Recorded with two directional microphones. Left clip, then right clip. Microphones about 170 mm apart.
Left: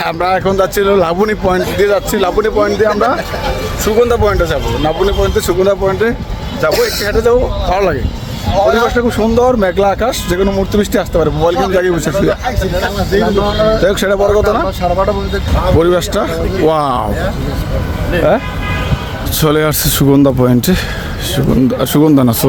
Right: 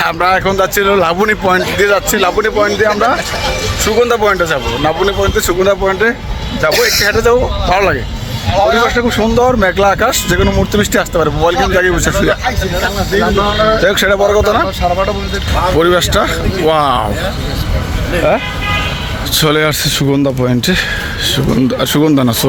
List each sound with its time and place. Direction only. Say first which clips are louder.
0.0 s speech: right 2 dB; 10° left (ahead or behind)
4.0 s speech: right 1 dB; 10° left (ahead or behind)
8.5 s speech: even; 25° left (ahead or behind); by 12.5 s 5° left (ahead or behind)
13.1 s speech: even; 20° left (ahead or behind)
19.4 s speech: even; 15° left (ahead or behind)
19.8 s speech: left 2 dB; 35° left (ahead or behind)
20.4 s speech: even; 25° left (ahead or behind)